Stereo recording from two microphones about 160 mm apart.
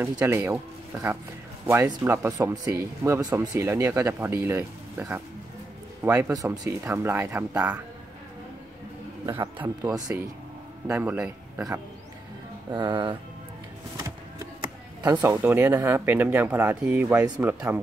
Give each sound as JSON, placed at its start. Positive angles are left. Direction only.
{"t": 0.0, "sound": "speech", "side_deg": -15}
{"t": 6.3, "sound": "speech", "side_deg": -25}
{"t": 9.2, "sound": "a man's voice", "side_deg": -25}
{"t": 10.9, "sound": "a man's voice", "side_deg": -10}
{"t": 12.7, "sound": "speech", "side_deg": -30}
{"t": 15.0, "sound": "speech", "side_deg": -25}